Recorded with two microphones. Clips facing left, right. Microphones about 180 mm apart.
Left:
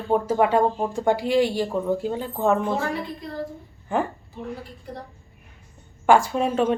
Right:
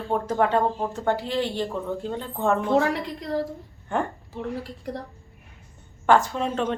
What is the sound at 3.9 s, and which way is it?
Speech, 5° left (ahead or behind).